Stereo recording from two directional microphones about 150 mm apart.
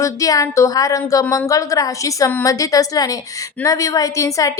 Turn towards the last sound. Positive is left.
turn(degrees=20)  # may be behind; listen again after turning